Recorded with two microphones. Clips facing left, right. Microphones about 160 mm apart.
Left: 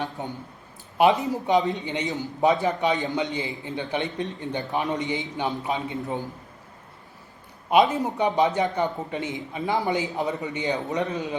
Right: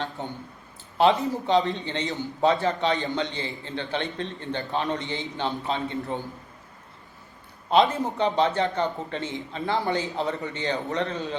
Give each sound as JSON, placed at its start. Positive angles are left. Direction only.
{"t": 0.2, "sound": "a man's voice", "side_deg": 15}
{"t": 7.7, "sound": "a man's voice", "side_deg": 15}